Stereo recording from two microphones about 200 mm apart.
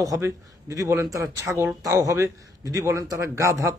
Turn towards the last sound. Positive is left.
turn(degrees=-15)  # may be behind; listen again after turning